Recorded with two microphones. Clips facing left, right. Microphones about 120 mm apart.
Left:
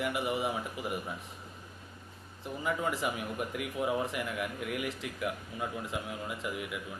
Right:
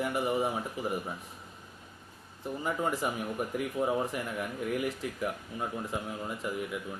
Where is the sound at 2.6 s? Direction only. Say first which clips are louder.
Right 1 dB; 40° right (ahead or behind).